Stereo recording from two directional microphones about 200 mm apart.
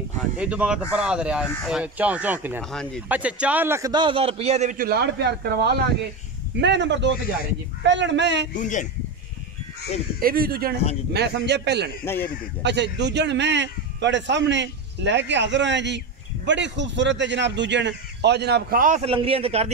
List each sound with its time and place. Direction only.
0.4 s speech: 5° right (ahead or behind)
2.7 s a man's voice: 5° left (ahead or behind); by 8.5 s 60° right (ahead or behind)
8.5 s speech: 40° left (ahead or behind)
10.2 s a man's voice: 50° right (ahead or behind)
12.0 s speech: 10° left (ahead or behind)
12.6 s a man's voice: 60° right (ahead or behind)
19.0 s a man's voice: 30° right (ahead or behind)